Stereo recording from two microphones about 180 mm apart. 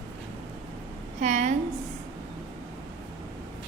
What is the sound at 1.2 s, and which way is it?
Speech, 40° right (ahead or behind).